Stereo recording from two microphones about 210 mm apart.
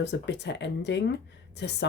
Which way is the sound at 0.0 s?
55° left (ahead or behind).